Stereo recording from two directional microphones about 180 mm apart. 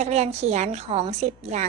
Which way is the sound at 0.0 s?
35° right (ahead or behind).